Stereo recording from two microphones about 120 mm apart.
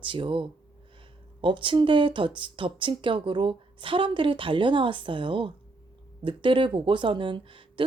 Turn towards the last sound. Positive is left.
turn(degrees=-45)  # may be behind; listen again after turning